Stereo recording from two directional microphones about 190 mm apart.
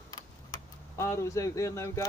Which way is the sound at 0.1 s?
20° left (ahead or behind).